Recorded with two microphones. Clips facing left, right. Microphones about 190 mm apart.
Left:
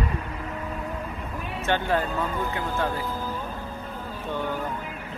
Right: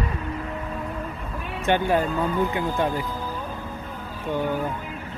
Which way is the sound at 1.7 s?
15° right (ahead or behind).